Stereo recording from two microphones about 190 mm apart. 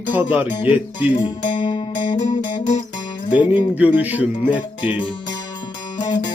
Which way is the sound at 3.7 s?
10° right (ahead or behind).